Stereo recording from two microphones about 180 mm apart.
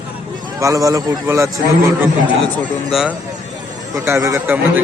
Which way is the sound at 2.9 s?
Centre (ahead or behind).